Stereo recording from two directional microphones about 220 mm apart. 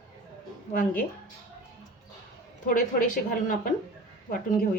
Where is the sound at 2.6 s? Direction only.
35° left (ahead or behind).